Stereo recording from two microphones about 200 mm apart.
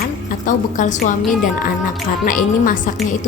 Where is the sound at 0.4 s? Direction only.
40° left (ahead or behind).